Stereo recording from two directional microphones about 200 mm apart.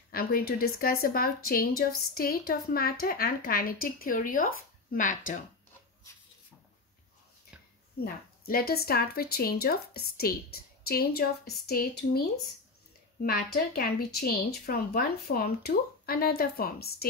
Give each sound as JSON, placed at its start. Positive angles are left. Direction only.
{"t": 0.1, "sound": "speech", "side_deg": 45}
{"t": 8.0, "sound": "speech", "side_deg": 50}
{"t": 13.2, "sound": "speech", "side_deg": 50}